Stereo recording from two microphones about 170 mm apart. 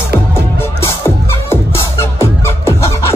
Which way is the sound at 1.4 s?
15° left (ahead or behind).